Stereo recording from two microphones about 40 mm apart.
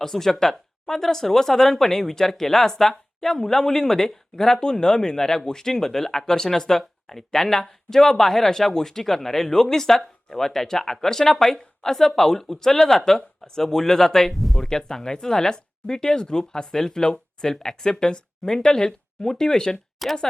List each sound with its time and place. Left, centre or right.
0.0 s speech: centre
14.6 s speech: centre
20.0 s speech: centre